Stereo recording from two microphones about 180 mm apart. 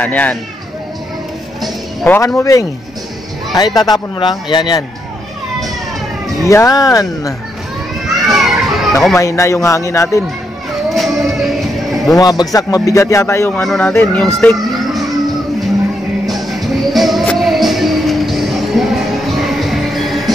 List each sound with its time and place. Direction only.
0.0 s speech: 10° left (ahead or behind)
1.6 s a man's voice: 10° left (ahead or behind)
6.5 s a man's voice: 20° left (ahead or behind)
8.2 s children playing: centre (ahead or behind)
9.1 s speech: 15° left (ahead or behind)
10.9 s cattle: centre (ahead or behind)
12.2 s a man's voice: 20° left (ahead or behind)
13.6 s speech: 5° left (ahead or behind)
16.3 s music: centre (ahead or behind)